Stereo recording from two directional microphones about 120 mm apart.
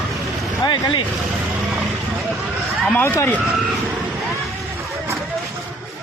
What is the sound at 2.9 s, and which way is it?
Speech, 20° left (ahead or behind).